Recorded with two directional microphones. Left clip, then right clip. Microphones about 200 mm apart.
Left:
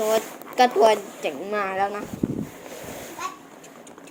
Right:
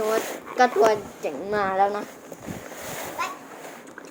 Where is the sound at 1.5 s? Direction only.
15° left (ahead or behind).